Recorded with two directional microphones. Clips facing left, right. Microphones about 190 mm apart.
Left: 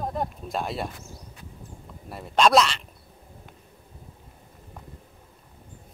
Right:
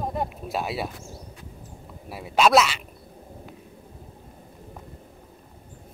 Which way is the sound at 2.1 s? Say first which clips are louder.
Right 1 dB; 5° right (ahead or behind).